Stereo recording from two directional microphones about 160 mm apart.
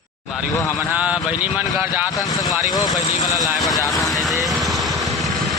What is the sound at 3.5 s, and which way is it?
Speech, centre (ahead or behind).